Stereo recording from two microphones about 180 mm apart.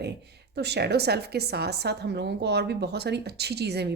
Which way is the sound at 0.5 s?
65° right (ahead or behind).